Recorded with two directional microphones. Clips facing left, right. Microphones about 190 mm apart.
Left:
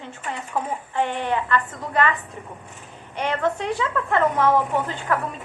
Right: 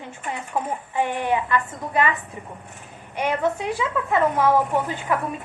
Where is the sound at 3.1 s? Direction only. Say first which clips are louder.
Right 1 dB; 10° right (ahead or behind).